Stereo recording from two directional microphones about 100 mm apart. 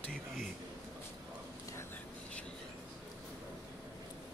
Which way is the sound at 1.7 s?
25° left (ahead or behind).